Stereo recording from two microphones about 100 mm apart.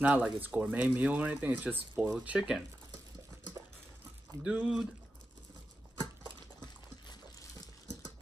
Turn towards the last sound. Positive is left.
turn(degrees=40)  # may be behind; listen again after turning